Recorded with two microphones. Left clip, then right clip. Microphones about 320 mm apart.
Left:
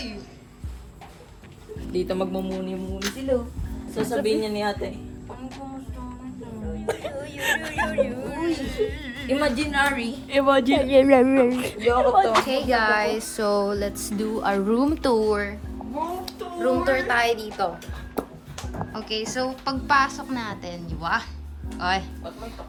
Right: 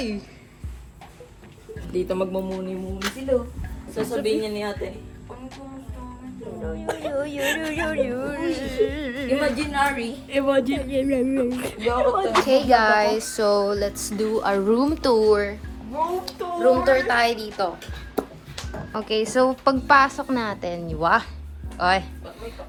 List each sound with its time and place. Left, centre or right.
1.9 s speech: centre
3.9 s speech: centre
6.7 s speech: centre
10.2 s a woman's voice: left
10.6 s speech: centre
12.3 s music: centre
16.2 s speech: centre
17.1 s music: centre
18.2 s speech: centre